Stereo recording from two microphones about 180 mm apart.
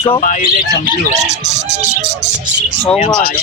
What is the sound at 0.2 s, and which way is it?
Speech, 45° left (ahead or behind).